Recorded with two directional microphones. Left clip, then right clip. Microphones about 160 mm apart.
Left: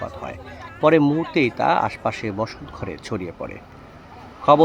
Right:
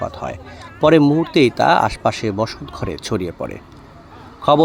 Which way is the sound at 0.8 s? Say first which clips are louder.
Right 4 dB; 25° right (ahead or behind).